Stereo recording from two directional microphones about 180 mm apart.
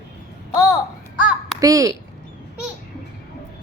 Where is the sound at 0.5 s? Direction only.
20° left (ahead or behind).